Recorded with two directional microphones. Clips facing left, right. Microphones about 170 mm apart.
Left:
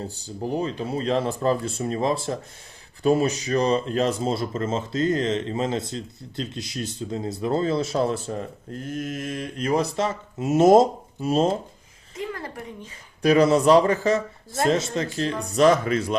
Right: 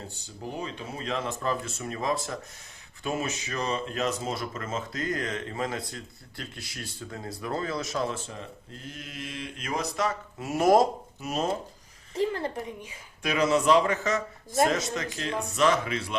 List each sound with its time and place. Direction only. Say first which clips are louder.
0.5 s speech: left 10 dB; 35° left (ahead or behind)
12.1 s a woman's voice: right 4 dB; 30° right (ahead or behind)
13.2 s speech: left 7 dB; 35° left (ahead or behind)